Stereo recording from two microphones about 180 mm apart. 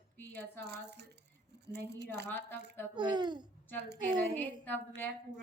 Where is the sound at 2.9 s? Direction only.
25° right (ahead or behind).